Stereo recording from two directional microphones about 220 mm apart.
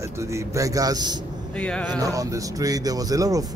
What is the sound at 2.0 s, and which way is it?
Speech, 15° right (ahead or behind).